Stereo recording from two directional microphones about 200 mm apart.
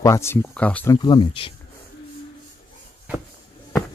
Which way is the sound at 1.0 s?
25° left (ahead or behind).